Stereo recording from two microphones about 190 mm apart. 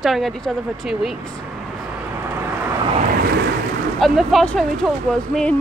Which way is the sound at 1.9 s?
10° right (ahead or behind).